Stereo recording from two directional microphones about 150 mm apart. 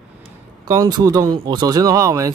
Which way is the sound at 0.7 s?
25° right (ahead or behind).